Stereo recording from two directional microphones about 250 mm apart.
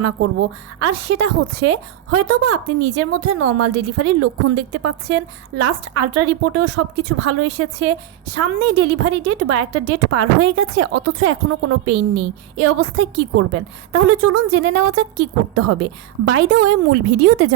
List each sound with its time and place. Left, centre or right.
0.8 s a woman's voice: right